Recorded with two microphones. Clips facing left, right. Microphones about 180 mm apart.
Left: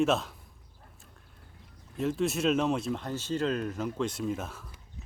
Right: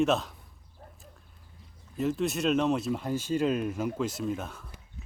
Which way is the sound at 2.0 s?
Centre (ahead or behind).